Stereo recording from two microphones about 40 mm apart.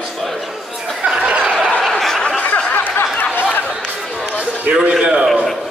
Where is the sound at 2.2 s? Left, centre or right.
Left.